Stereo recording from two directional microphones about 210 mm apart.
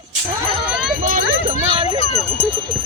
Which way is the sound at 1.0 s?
40° right (ahead or behind).